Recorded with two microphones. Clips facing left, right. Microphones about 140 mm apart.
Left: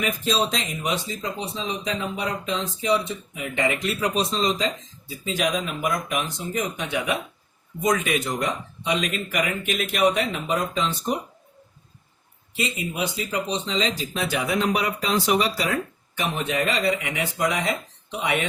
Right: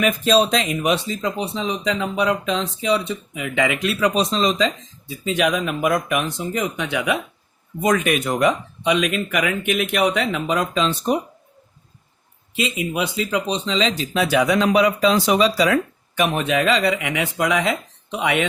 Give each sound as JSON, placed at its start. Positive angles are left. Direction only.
{"t": 0.0, "sound": "a man's voice", "side_deg": -70}
{"t": 5.2, "sound": "a man's voice", "side_deg": -65}
{"t": 12.5, "sound": "speech", "side_deg": -75}
{"t": 18.2, "sound": "speech", "side_deg": -85}